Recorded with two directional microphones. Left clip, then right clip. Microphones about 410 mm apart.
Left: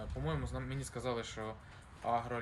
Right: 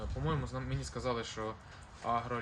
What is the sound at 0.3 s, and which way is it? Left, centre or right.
Speech, centre.